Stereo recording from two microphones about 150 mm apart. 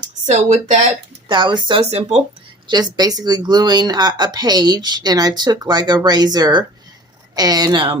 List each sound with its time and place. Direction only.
0.3 s speech: 50° right (ahead or behind)
1.3 s speech: 30° right (ahead or behind)
2.6 s speech: 30° right (ahead or behind)